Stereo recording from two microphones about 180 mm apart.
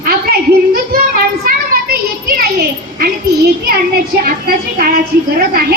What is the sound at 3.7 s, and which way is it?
Speech, 55° right (ahead or behind).